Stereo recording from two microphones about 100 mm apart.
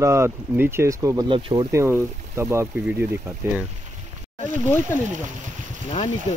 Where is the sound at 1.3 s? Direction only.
60° right (ahead or behind).